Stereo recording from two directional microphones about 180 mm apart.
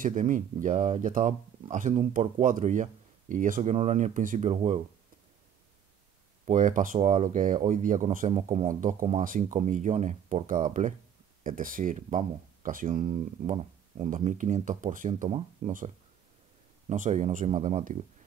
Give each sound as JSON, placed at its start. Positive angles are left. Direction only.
{"t": 0.0, "sound": "speech", "side_deg": -45}
{"t": 6.4, "sound": "speech", "side_deg": -45}
{"t": 13.0, "sound": "speech", "side_deg": -35}
{"t": 16.9, "sound": "speech", "side_deg": -45}